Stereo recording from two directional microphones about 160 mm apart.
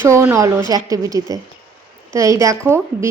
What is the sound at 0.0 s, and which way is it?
A woman's voice, 15° right (ahead or behind).